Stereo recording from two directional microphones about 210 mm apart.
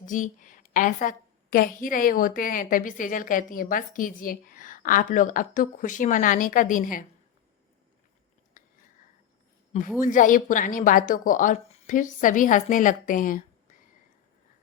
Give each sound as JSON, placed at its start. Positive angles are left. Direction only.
{"t": 0.0, "sound": "a woman's voice", "side_deg": 40}
{"t": 8.6, "sound": "a sound", "side_deg": 40}
{"t": 10.0, "sound": "a woman's voice", "side_deg": 40}